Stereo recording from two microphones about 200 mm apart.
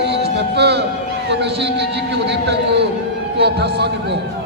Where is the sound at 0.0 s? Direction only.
55° right (ahead or behind).